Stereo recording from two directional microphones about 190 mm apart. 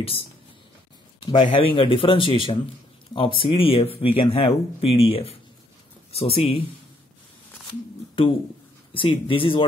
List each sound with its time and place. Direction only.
1.2 s speech: 25° left (ahead or behind)
8.9 s speech: 25° left (ahead or behind)